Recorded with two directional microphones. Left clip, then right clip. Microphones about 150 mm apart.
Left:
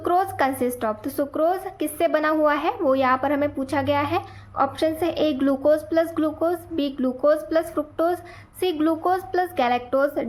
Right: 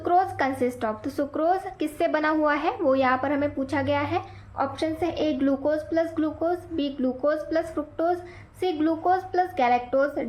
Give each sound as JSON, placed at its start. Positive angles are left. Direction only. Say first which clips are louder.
{"t": 0.0, "sound": "a woman's voice", "louder": "left 1 dB", "side_deg": 40}